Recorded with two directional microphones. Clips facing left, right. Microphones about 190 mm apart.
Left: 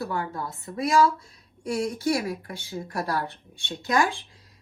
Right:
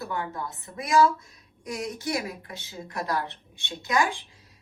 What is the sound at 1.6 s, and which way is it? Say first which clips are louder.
Speech: left 6 dB; 30° left (ahead or behind).